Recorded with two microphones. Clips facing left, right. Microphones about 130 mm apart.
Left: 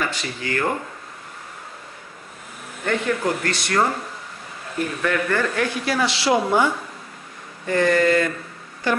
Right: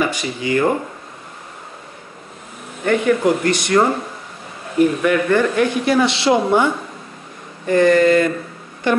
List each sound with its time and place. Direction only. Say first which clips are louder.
0.0 s speech: right 6 dB; 15° right (ahead or behind)
2.8 s speech: right 7 dB; 15° right (ahead or behind)
5.0 s speech: right 6 dB; 15° right (ahead or behind)